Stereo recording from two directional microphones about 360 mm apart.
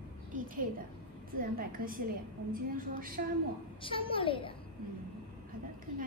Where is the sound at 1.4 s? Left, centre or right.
Right.